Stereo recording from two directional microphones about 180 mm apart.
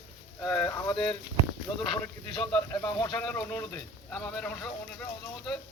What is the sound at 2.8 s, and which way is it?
Speech, 20° left (ahead or behind).